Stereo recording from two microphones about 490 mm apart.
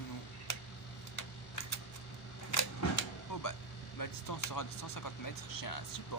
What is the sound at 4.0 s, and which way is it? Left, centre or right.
Speech, left.